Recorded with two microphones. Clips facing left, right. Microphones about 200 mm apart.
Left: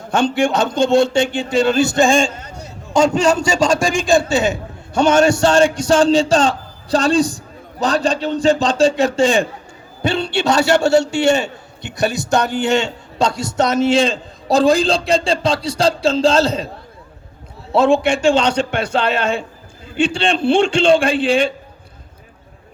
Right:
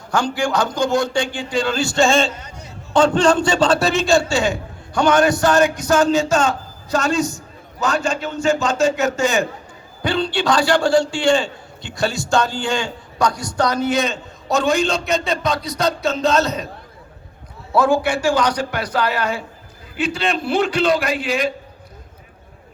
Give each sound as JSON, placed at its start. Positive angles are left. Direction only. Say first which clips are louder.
{"t": 0.1, "sound": "a man's voice", "louder": "left 4 dB", "side_deg": 25}
{"t": 17.7, "sound": "a man's voice", "louder": "left 3 dB", "side_deg": 25}